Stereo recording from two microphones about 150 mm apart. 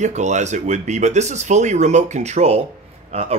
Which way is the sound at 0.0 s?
50° right (ahead or behind).